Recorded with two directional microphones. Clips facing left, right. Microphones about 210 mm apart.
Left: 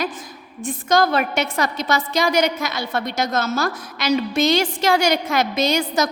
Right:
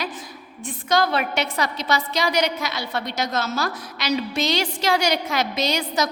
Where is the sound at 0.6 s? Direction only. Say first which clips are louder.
Left 3 dB; 45° left (ahead or behind).